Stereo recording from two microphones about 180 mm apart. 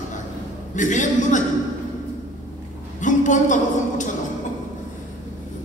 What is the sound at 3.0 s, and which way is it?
A woman's voice, 45° left (ahead or behind).